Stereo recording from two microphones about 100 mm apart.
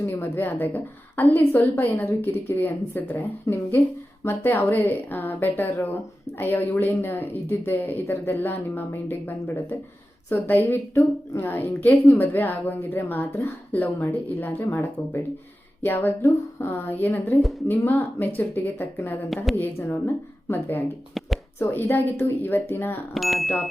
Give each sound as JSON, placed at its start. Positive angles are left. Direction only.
{"t": 0.0, "sound": "a woman's voice", "side_deg": 25}
{"t": 20.5, "sound": "a woman's voice", "side_deg": 25}
{"t": 23.1, "sound": "speech", "side_deg": 0}